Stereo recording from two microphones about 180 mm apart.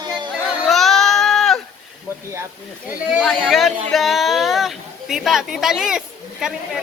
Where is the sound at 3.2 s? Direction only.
5° left (ahead or behind).